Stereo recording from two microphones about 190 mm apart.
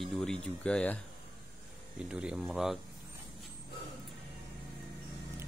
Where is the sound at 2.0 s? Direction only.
5° right (ahead or behind).